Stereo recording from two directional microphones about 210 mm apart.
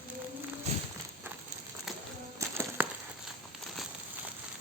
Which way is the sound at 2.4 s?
15° right (ahead or behind).